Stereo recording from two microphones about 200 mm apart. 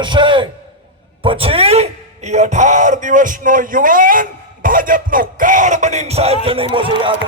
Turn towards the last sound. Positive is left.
turn(degrees=-25)  # may be behind; listen again after turning